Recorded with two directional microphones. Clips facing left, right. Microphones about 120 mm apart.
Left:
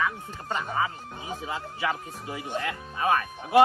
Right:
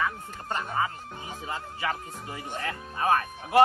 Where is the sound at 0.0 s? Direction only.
Centre (ahead or behind).